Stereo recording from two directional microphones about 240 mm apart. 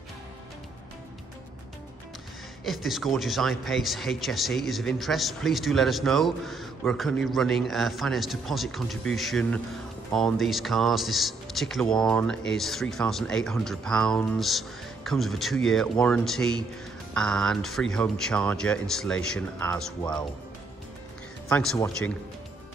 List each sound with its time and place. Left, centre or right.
2.6 s speech: centre
21.5 s speech: centre